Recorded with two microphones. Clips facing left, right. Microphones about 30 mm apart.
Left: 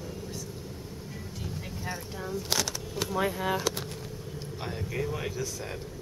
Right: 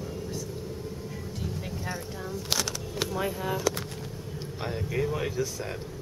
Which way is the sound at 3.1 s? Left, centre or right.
Left.